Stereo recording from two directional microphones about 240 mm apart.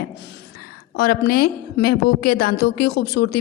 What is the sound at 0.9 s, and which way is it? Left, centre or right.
A woman's voice, left.